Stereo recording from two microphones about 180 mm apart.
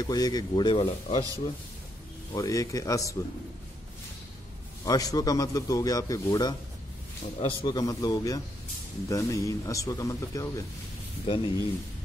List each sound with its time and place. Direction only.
0.0 s a man's voice: 20° left (ahead or behind)
2.3 s a man's voice: 20° left (ahead or behind)
4.8 s a man's voice: 20° left (ahead or behind)
11.2 s a man's voice: 30° left (ahead or behind)